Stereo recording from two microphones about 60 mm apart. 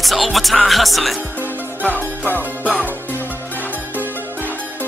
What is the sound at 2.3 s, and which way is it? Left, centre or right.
Music, left.